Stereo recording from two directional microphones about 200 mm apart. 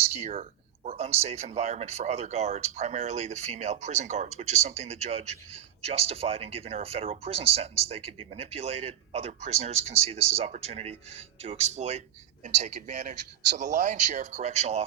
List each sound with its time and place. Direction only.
0.1 s speech: 30° right (ahead or behind)